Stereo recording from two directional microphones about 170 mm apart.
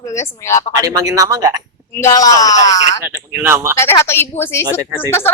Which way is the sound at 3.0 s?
15° right (ahead or behind).